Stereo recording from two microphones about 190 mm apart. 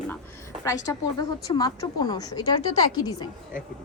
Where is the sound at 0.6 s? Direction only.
15° left (ahead or behind).